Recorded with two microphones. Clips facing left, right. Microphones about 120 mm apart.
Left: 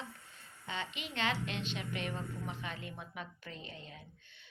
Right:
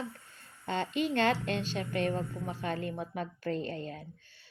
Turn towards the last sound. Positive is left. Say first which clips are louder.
# right 14 dB
turn(degrees=-45)  # may be behind; listen again after turning